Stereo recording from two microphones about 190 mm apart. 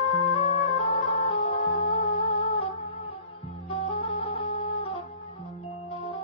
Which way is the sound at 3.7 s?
25° left (ahead or behind).